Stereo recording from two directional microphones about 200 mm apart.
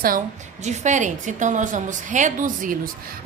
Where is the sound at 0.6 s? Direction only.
35° right (ahead or behind).